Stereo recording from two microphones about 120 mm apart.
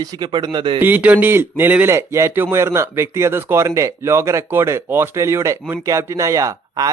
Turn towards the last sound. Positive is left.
turn(degrees=-30)  # may be behind; listen again after turning